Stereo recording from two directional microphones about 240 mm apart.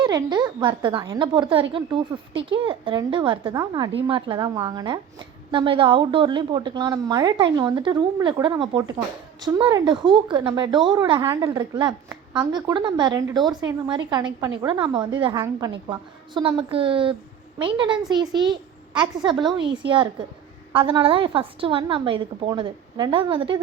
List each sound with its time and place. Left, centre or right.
0.0 s a woman's voice: centre